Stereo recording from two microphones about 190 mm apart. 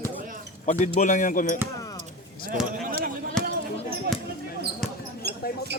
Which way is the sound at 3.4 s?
5° left (ahead or behind).